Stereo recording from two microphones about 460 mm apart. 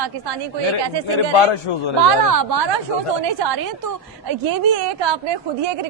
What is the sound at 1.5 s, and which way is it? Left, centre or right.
Speech, left.